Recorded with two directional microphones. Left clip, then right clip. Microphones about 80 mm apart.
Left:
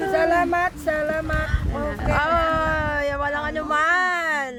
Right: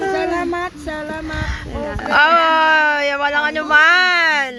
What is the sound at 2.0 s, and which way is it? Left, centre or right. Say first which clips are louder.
Speech: right 9 dB; right.